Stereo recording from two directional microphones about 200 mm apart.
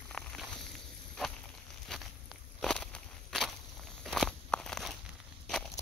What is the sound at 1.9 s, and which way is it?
Walk, centre (ahead or behind).